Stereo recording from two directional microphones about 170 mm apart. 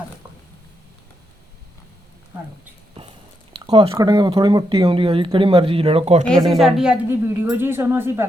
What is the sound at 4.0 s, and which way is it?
Speech, 25° right (ahead or behind).